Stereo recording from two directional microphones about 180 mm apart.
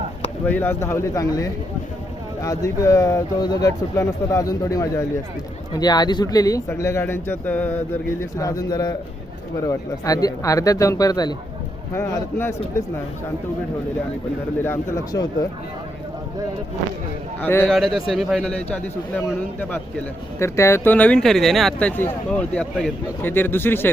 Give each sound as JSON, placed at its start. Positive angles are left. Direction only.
{"t": 0.4, "sound": "speech", "side_deg": 10}
{"t": 14.6, "sound": "speech", "side_deg": 15}
{"t": 17.4, "sound": "speech", "side_deg": 10}
{"t": 17.7, "sound": "a man's voice", "side_deg": 0}
{"t": 20.4, "sound": "speech", "side_deg": 15}